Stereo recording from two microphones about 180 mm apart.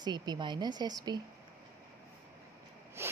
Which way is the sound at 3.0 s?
15° right (ahead or behind).